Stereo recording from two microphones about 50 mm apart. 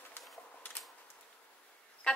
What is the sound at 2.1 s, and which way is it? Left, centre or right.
Music, left.